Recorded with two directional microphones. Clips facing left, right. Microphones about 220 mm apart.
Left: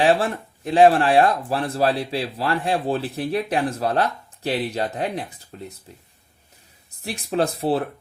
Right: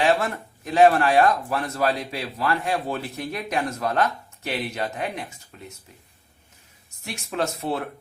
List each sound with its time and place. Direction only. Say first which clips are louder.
0.0 s speech: left 3 dB; 30° left (ahead or behind)
6.9 s speech: left 6 dB; 35° left (ahead or behind)